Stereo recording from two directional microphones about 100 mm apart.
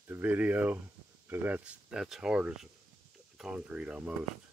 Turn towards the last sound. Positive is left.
turn(degrees=-10)  # may be behind; listen again after turning